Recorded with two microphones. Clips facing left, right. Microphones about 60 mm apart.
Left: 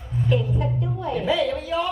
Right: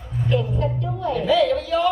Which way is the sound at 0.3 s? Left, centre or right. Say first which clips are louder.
Right 2 dB; centre.